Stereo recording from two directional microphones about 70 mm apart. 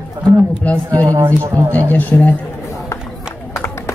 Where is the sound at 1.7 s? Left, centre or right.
Left.